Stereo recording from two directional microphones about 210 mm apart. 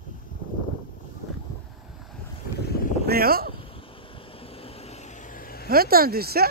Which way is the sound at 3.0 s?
45° right (ahead or behind).